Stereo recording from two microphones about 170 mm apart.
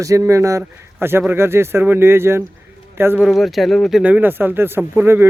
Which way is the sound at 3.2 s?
Centre (ahead or behind).